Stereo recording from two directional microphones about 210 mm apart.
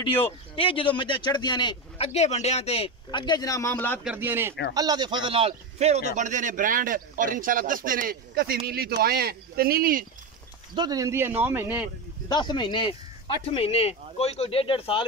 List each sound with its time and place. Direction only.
0.6 s a man's voice: 25° left (ahead or behind)
4.0 s a man's voice: 10° right (ahead or behind); by 10.0 s 45° right (ahead or behind)
10.7 s speech: 20° right (ahead or behind)
12.3 s a man's voice: 20° left (ahead or behind)